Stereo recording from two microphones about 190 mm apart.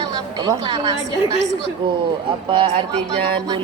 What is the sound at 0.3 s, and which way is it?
Speech, 20° right (ahead or behind).